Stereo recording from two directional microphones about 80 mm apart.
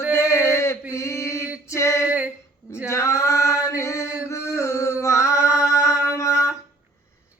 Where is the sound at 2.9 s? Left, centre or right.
Left.